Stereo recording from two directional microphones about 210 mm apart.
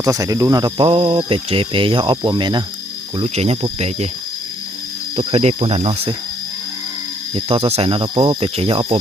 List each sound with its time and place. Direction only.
0.0 s speech: 15° right (ahead or behind)
5.1 s speech: 30° right (ahead or behind)
7.3 s speech: 25° right (ahead or behind)